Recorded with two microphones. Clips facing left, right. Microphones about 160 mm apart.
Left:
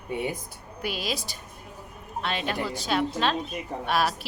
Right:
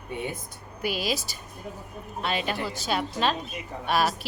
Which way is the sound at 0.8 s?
Centre (ahead or behind).